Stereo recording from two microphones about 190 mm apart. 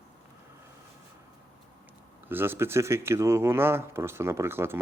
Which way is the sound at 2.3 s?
10° right (ahead or behind).